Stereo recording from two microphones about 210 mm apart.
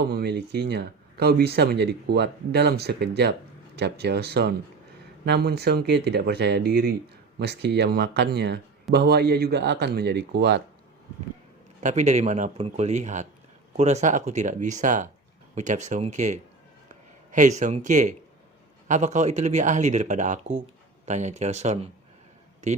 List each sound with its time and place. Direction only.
0.1 s speech: 50° right (ahead or behind)
11.8 s speech: 35° right (ahead or behind)